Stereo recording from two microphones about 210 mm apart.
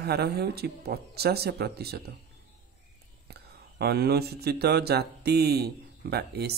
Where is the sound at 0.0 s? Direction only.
50° right (ahead or behind).